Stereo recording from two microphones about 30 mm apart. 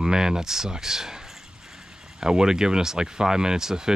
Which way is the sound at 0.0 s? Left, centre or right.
Centre.